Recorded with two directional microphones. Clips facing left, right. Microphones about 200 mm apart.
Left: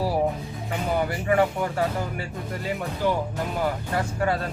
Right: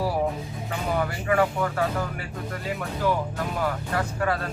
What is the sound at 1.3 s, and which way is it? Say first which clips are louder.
Speech: left 1 dB; 30° left (ahead or behind).